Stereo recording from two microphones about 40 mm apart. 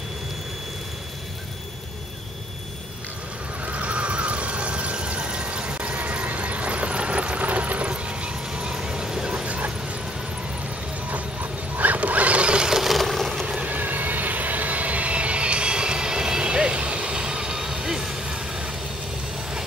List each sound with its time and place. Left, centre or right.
3.6 s a sound: right
7.9 s vehicle: right
9.3 s bow-wow: right
11.7 s mechanisms: right
12.7 s a sound: centre
13.7 s vehicle: right; by 18.4 s centre